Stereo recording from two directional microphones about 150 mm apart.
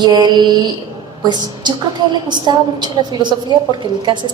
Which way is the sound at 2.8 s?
30° right (ahead or behind).